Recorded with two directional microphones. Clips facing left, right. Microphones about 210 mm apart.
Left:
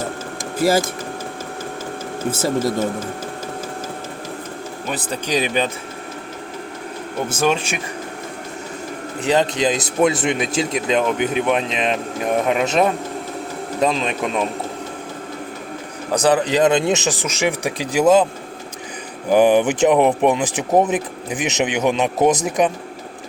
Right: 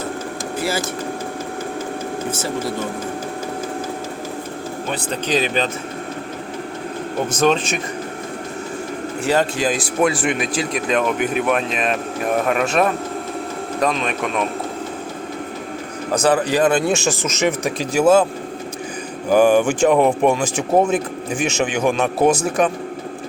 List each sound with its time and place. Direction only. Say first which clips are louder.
0.6 s speech: left 7 dB; 40° left (ahead or behind)
4.9 s speech: right 1 dB; 15° left (ahead or behind)
7.3 s speech: right 2 dB; 10° left (ahead or behind)
9.2 s speech: left 1 dB; 20° left (ahead or behind)
16.2 s speech: left 1 dB; 20° left (ahead or behind)
19.3 s speech: even; 20° left (ahead or behind)